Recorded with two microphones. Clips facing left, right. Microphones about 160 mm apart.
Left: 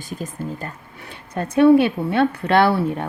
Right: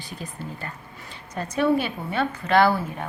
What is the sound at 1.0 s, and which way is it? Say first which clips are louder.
A woman's voice: left 5 dB; 55° left (ahead or behind).